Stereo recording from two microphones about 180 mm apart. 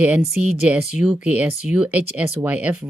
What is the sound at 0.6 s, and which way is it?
Speech, 5° right (ahead or behind).